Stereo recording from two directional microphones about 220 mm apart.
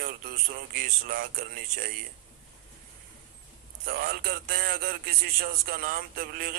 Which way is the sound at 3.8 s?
45° right (ahead or behind).